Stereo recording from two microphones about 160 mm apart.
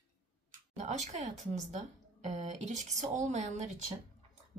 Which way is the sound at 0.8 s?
45° right (ahead or behind).